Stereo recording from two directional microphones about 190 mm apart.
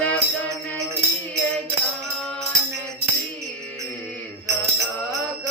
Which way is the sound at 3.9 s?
5° left (ahead or behind).